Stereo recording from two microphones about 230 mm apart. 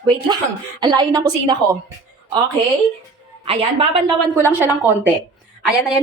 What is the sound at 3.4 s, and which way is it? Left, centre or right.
Speech, right.